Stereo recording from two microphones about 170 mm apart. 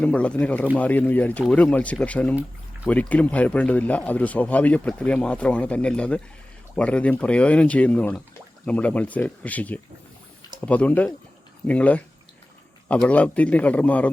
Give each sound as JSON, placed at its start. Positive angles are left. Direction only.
{"t": 0.0, "sound": "speech", "side_deg": 5}